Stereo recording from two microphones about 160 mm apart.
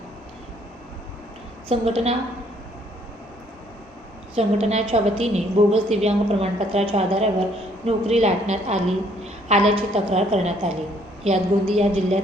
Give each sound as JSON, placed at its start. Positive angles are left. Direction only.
{"t": 1.6, "sound": "a woman's voice", "side_deg": -40}
{"t": 4.4, "sound": "a woman's voice", "side_deg": -45}